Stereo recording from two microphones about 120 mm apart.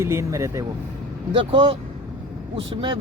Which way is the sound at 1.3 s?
45° right (ahead or behind).